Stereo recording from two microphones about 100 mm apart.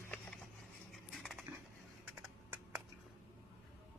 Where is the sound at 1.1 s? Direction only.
Centre (ahead or behind).